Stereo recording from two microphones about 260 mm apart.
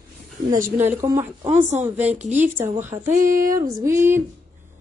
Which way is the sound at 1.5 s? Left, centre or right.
Right.